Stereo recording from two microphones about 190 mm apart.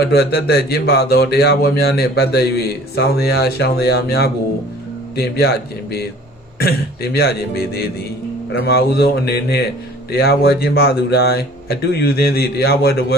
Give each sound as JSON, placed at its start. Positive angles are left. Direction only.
{"t": 0.0, "sound": "speech", "side_deg": 55}